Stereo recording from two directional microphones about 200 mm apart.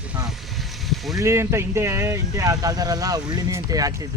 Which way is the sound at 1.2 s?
15° right (ahead or behind).